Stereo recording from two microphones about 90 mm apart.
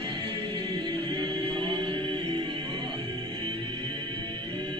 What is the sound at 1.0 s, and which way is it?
Music, 75° right (ahead or behind).